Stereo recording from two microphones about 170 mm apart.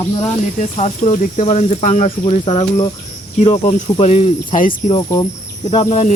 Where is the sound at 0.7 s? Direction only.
40° left (ahead or behind).